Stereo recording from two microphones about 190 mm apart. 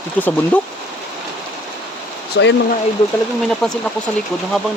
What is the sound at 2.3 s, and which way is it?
Speech, 70° left (ahead or behind).